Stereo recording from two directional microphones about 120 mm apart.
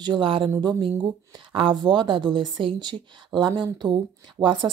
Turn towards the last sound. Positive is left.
turn(degrees=-40)  # may be behind; listen again after turning